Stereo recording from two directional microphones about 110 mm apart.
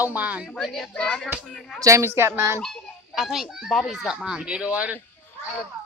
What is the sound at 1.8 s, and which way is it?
Speech, 25° right (ahead or behind).